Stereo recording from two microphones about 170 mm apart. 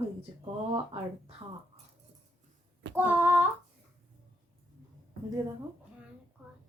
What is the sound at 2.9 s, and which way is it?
Speech, 10° right (ahead or behind).